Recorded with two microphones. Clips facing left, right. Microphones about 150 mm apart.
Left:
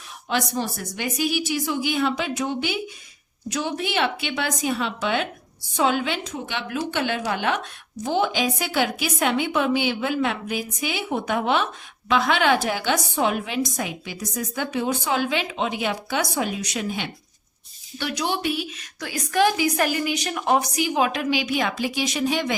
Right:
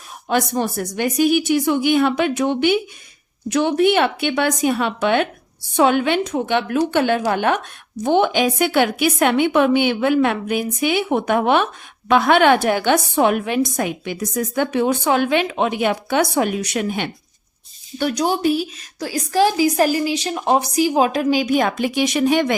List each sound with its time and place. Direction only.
0.3 s a woman's voice: 55° right (ahead or behind)
8.0 s a woman's voice: 60° right (ahead or behind)
17.9 s a woman's voice: 45° right (ahead or behind)